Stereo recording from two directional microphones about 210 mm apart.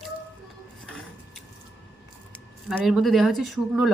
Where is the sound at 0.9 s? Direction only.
5° left (ahead or behind).